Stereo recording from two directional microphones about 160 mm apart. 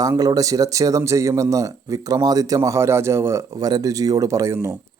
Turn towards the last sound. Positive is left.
turn(degrees=-20)  # may be behind; listen again after turning